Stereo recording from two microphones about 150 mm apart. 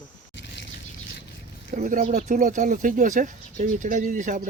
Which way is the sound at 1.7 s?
60° right (ahead or behind).